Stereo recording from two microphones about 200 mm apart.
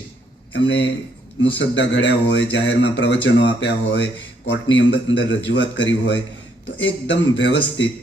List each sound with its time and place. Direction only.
0.5 s speech: 65° left (ahead or behind)